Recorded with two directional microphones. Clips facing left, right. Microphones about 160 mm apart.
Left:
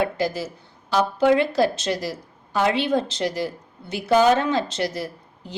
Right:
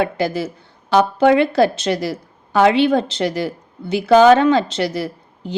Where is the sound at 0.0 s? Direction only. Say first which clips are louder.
Right 4 dB; 65° right (ahead or behind).